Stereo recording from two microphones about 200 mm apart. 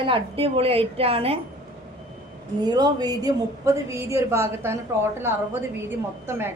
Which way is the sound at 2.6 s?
20° right (ahead or behind).